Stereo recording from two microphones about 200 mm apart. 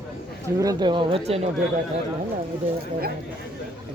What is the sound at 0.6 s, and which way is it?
Speech, 20° right (ahead or behind).